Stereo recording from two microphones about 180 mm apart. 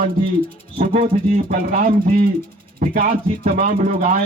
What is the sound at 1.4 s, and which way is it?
Speech, 50° right (ahead or behind).